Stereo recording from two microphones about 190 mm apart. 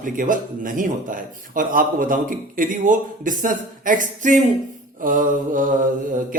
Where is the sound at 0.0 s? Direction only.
45° right (ahead or behind).